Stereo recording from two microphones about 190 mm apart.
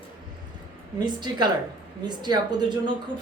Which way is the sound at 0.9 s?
25° right (ahead or behind).